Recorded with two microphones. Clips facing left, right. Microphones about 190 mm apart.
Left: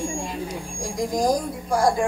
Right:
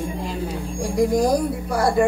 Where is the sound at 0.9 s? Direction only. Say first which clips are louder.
Right 4 dB; 65° right (ahead or behind).